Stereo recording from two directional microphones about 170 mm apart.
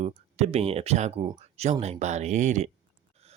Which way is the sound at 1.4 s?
40° right (ahead or behind).